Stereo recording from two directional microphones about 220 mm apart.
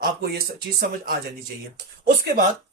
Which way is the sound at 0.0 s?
45° right (ahead or behind).